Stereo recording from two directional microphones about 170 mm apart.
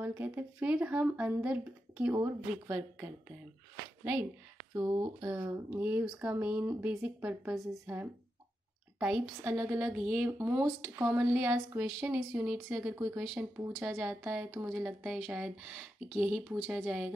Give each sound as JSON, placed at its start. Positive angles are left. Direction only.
{"t": 0.0, "sound": "speech", "side_deg": -10}
{"t": 4.8, "sound": "speech", "side_deg": -20}
{"t": 5.3, "sound": "speech", "side_deg": -10}
{"t": 13.8, "sound": "speech", "side_deg": -5}